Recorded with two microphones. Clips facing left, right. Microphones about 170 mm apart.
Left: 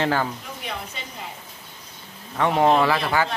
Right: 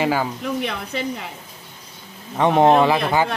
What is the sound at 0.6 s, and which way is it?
Speech, 75° right (ahead or behind).